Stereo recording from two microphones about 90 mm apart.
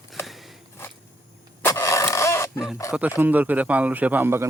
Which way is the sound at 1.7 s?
35° left (ahead or behind).